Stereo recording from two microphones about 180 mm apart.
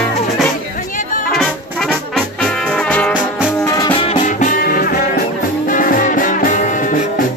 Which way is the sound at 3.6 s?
20° left (ahead or behind).